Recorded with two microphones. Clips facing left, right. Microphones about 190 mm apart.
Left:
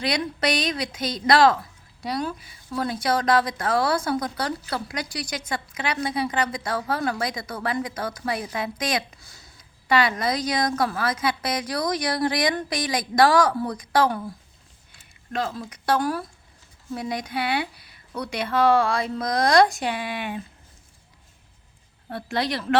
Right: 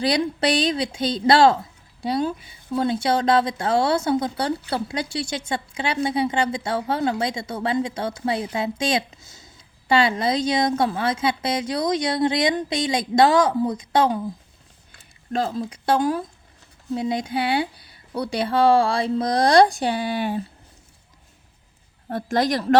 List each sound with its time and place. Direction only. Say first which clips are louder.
0.0 s a woman's voice: right 4 dB; 30° right (ahead or behind)
15.3 s a woman's voice: right 4 dB; 30° right (ahead or behind)
22.1 s a woman's voice: right 5 dB; 45° right (ahead or behind)